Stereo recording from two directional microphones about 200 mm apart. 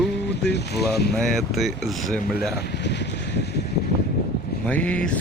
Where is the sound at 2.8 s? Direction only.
60° left (ahead or behind).